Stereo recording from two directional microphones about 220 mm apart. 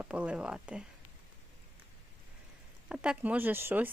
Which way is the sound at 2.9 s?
5° right (ahead or behind).